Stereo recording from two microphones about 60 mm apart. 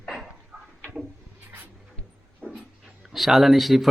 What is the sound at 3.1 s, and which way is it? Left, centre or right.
Speech, centre.